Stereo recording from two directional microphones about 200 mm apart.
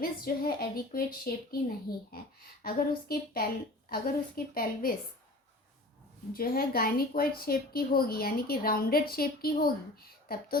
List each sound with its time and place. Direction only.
0.0 s a woman's voice: 45° left (ahead or behind)
6.3 s a woman's voice: 45° left (ahead or behind)